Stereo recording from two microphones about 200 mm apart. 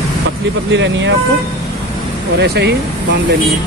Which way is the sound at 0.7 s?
65° right (ahead or behind).